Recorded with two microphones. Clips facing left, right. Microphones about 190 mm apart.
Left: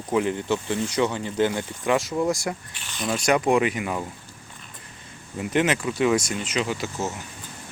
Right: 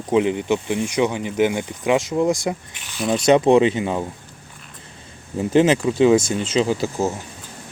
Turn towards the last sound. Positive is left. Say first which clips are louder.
# right 7 dB
turn(degrees=-30)  # may be behind; listen again after turning